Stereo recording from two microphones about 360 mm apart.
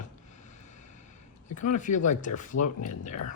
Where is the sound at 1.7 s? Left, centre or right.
Left.